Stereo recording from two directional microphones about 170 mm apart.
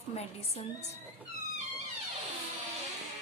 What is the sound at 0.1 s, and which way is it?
Speech, 40° left (ahead or behind).